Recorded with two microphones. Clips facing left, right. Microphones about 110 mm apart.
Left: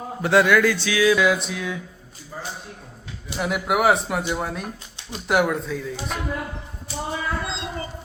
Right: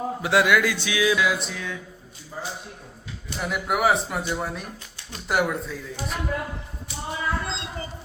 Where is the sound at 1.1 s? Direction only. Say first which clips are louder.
Left 4 dB; centre (ahead or behind).